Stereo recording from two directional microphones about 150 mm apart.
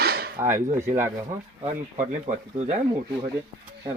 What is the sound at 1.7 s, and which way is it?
Speech, 55° right (ahead or behind).